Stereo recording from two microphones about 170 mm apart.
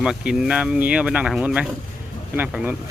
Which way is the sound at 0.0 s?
5° right (ahead or behind).